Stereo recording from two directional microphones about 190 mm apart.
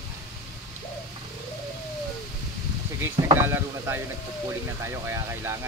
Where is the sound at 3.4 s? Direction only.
10° right (ahead or behind).